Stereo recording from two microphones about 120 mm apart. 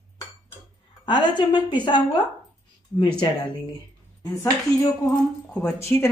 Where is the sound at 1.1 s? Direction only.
40° left (ahead or behind).